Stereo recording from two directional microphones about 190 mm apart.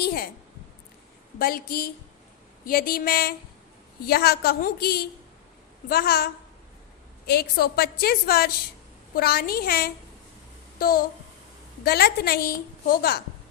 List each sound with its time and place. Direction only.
0.0 s a sound: 55° left (ahead or behind)
1.4 s a woman's voice: 50° left (ahead or behind)
7.3 s a woman's voice: 55° left (ahead or behind)